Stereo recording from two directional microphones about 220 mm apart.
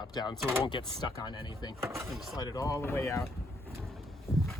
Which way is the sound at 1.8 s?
10° right (ahead or behind).